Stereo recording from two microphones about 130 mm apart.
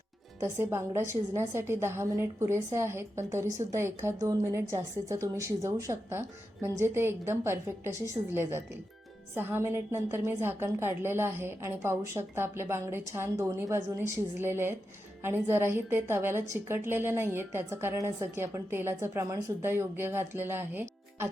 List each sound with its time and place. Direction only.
0.4 s a woman's voice: 20° right (ahead or behind)